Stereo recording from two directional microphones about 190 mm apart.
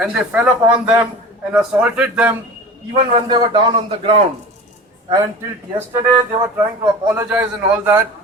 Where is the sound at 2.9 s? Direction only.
30° right (ahead or behind).